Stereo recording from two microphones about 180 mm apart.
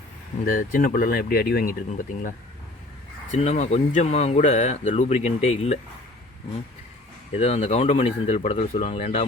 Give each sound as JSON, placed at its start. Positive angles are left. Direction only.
{"t": 0.4, "sound": "speech", "side_deg": 50}
{"t": 3.3, "sound": "speech", "side_deg": 40}
{"t": 7.3, "sound": "speech", "side_deg": 40}